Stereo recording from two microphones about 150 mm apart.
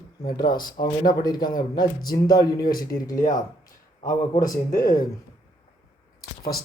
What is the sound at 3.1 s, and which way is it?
A man's voice, 60° left (ahead or behind).